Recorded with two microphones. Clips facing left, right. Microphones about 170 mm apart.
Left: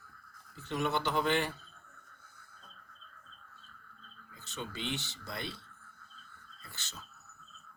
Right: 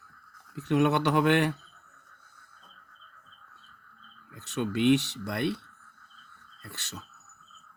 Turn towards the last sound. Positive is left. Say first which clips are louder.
# right 7 dB
turn(degrees=-70)  # may be behind; listen again after turning